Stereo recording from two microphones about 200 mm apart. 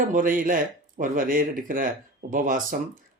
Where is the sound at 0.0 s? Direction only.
40° right (ahead or behind).